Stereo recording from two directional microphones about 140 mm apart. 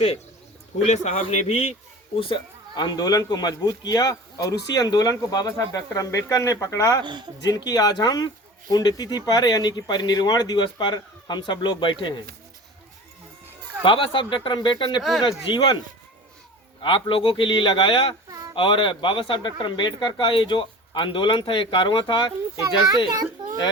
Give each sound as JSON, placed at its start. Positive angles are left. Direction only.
{"t": 0.9, "sound": "a man's voice", "side_deg": 50}
{"t": 7.0, "sound": "speech", "side_deg": -30}
{"t": 7.4, "sound": "a man's voice", "side_deg": 30}
{"t": 13.8, "sound": "speech", "side_deg": 35}
{"t": 16.8, "sound": "speech", "side_deg": 35}
{"t": 18.3, "sound": "a sound", "side_deg": -25}
{"t": 18.5, "sound": "speech", "side_deg": 35}